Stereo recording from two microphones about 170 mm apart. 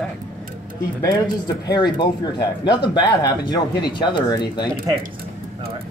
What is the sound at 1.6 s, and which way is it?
A man's voice, 25° left (ahead or behind).